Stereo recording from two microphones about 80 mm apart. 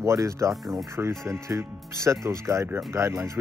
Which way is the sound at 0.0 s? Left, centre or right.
Right.